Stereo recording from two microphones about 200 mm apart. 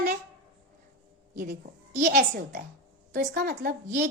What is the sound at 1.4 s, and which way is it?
A woman's voice, 45° right (ahead or behind).